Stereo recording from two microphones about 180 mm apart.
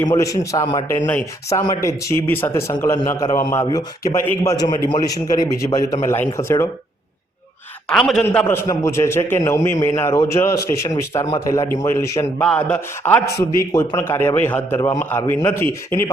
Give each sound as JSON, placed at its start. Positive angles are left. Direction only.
{"t": 0.1, "sound": "a man's voice", "side_deg": 20}
{"t": 7.9, "sound": "a man's voice", "side_deg": 5}